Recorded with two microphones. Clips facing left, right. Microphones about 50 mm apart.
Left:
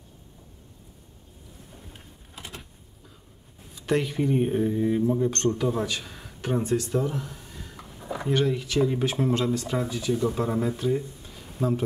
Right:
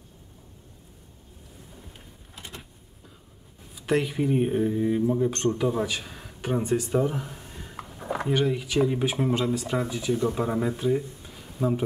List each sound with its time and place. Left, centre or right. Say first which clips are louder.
2.3 s power windows: left 1 dB; centre
3.7 s speech: even; centre
7.7 s a sound: right 4 dB; right
8.3 s speech: left 1 dB; centre